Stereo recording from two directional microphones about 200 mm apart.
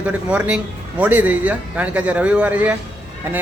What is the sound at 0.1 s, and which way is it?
A man's voice, 5° right (ahead or behind).